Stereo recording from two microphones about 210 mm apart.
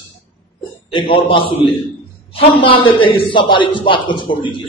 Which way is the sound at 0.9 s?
25° left (ahead or behind).